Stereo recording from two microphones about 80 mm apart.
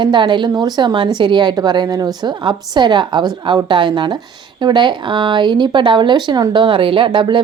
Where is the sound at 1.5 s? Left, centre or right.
Right.